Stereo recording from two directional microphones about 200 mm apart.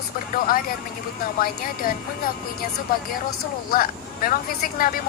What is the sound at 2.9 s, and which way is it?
Speech, 45° left (ahead or behind).